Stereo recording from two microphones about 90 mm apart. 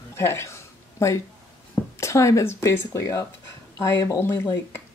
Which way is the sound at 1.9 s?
35° left (ahead or behind).